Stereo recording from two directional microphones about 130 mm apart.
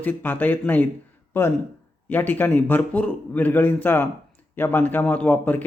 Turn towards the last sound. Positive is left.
turn(degrees=10)  # may be behind; listen again after turning